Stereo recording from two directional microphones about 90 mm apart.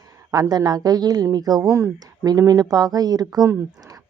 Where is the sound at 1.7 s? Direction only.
30° right (ahead or behind).